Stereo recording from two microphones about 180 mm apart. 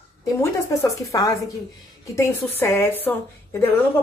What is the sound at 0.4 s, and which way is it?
A woman's voice, 20° left (ahead or behind).